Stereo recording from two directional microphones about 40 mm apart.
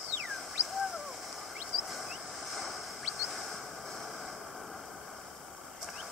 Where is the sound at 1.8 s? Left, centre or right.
Centre.